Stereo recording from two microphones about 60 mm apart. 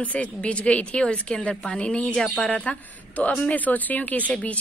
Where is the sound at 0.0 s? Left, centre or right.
Left.